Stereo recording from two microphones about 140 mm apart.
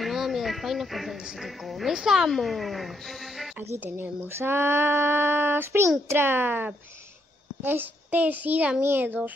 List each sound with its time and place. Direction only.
0.0 s speech: centre (ahead or behind)
3.7 s speech: 15° right (ahead or behind)